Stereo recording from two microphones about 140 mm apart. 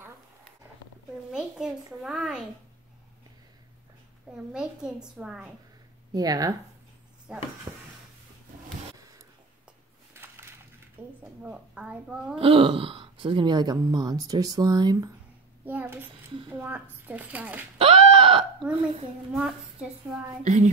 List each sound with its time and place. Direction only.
1.3 s a child's voice: 5° right (ahead or behind)
4.5 s a woman's voice: 5° right (ahead or behind)
6.1 s speech: 25° right (ahead or behind)
7.7 s speech: 25° right (ahead or behind)
8.9 s a sound: 25° right (ahead or behind)
11.4 s a woman's voice: 5° right (ahead or behind)
12.4 s speech: 40° right (ahead or behind)
15.6 s a woman's voice: 15° right (ahead or behind)
17.7 s a sound: 40° right (ahead or behind)
19.3 s a woman's voice: 5° right (ahead or behind)
20.4 s a woman's voice: 60° right (ahead or behind)